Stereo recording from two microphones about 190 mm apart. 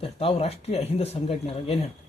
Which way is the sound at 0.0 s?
30° left (ahead or behind).